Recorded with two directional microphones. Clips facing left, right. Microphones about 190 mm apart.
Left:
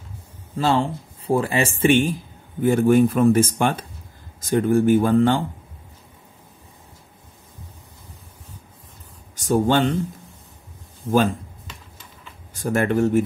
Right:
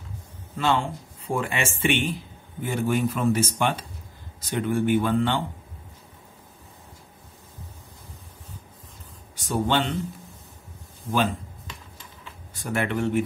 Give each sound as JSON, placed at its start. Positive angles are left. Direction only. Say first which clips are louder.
{"t": 0.6, "sound": "speech", "louder": "left 4 dB", "side_deg": 35}
{"t": 9.3, "sound": "speech", "louder": "left 6 dB", "side_deg": 45}
{"t": 12.5, "sound": "speech", "louder": "left 6 dB", "side_deg": 45}